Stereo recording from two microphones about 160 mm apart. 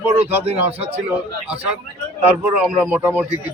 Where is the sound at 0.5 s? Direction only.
10° right (ahead or behind).